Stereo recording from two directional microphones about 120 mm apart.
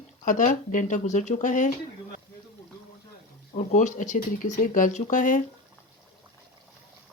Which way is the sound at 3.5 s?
90° left.